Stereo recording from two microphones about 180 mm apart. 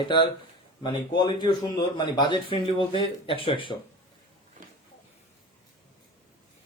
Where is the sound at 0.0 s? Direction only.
25° left (ahead or behind).